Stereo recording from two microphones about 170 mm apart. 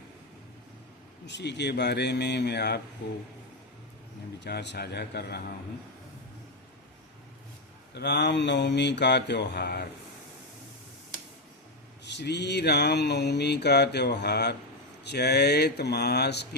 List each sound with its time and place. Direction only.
1.3 s mantra: 90° left
4.4 s speech: 80° left
7.9 s mantra: 85° left
12.0 s mantra: 90° left
15.0 s speech: 75° left (ahead or behind)